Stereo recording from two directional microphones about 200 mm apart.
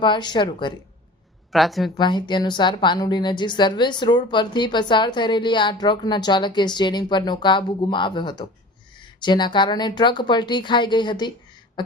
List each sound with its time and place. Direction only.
0.0 s a woman's voice: 20° left (ahead or behind)
1.5 s a woman's voice: centre (ahead or behind)
2.0 s a woman's voice: 20° left (ahead or behind)